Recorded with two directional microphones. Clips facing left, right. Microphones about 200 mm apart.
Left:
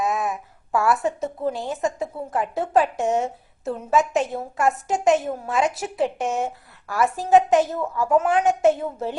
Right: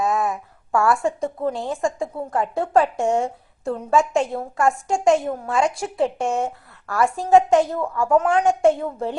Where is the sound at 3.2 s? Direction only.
Centre (ahead or behind).